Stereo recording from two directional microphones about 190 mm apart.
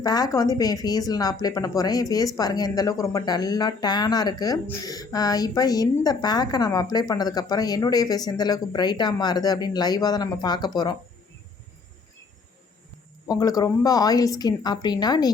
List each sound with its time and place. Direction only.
0.0 s a woman's voice: 20° left (ahead or behind)
13.2 s a woman's voice: 20° left (ahead or behind)